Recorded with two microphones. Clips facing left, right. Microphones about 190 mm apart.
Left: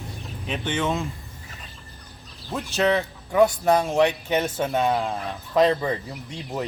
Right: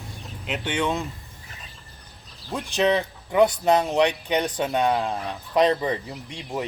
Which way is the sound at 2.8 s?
15° right (ahead or behind).